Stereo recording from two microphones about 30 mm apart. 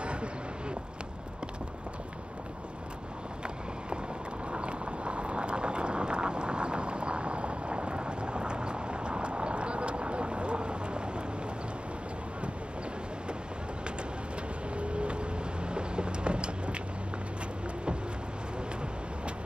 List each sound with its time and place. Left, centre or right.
0.0 s a sound: right
4.5 s vehicle: right
14.8 s vehicle: right